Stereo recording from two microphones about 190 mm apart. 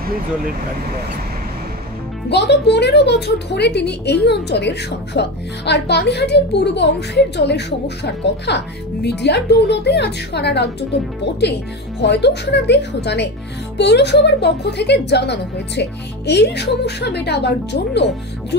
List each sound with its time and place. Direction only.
2.2 s a child's voice: 60° left (ahead or behind)
12.0 s a child's voice: 60° left (ahead or behind)